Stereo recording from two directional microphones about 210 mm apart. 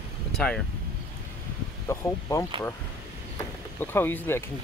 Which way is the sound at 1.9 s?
15° left (ahead or behind).